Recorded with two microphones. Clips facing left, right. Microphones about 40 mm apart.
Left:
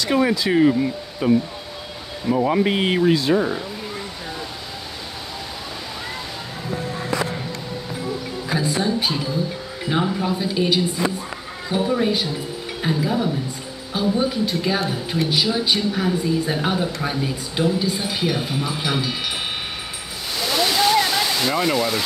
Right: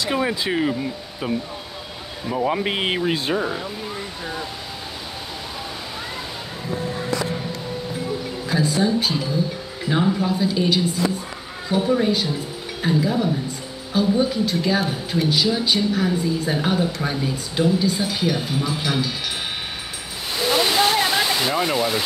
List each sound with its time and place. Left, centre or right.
0.0 s speech: centre
2.6 s speech: centre
8.5 s a woman's voice: centre
20.5 s waterfall: right; by 22.0 s centre